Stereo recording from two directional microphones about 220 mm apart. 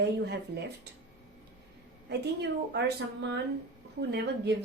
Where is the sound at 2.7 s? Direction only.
50° right (ahead or behind).